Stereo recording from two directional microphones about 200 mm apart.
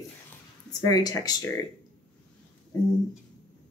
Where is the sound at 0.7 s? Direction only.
20° left (ahead or behind).